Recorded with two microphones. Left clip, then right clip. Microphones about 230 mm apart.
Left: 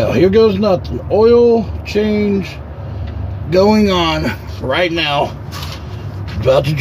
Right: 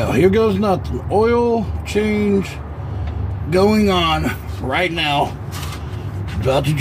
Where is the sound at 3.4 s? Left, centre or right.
Left.